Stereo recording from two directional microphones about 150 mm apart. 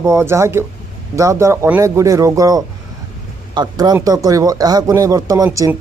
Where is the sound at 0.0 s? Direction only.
20° right (ahead or behind).